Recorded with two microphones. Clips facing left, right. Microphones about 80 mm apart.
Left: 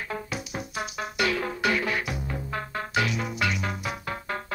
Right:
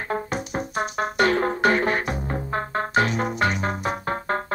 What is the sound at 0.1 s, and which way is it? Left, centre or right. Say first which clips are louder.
Music: right 9 dB; right.